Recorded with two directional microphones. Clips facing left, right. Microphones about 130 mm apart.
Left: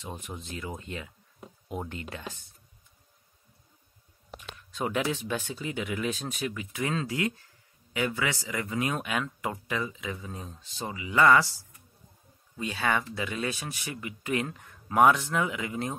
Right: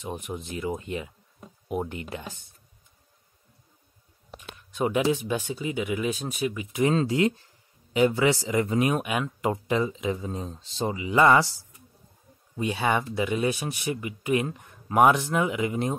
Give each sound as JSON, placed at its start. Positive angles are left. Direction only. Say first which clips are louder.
{"t": 0.0, "sound": "speech", "louder": "right 6 dB", "side_deg": -15}
{"t": 4.7, "sound": "speech", "louder": "right 6 dB", "side_deg": -15}
{"t": 9.5, "sound": "speech", "louder": "right 11 dB", "side_deg": -25}
{"t": 12.5, "sound": "speech", "louder": "right 4 dB", "side_deg": -20}